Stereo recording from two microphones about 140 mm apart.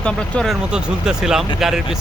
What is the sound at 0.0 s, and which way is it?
Speech, 5° left (ahead or behind).